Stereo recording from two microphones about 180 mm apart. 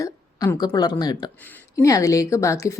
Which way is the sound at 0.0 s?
20° left (ahead or behind).